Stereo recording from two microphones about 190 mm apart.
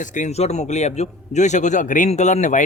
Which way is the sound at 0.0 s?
40° left (ahead or behind).